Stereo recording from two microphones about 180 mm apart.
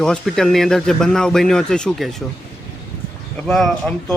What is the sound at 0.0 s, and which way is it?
Speech, 5° left (ahead or behind).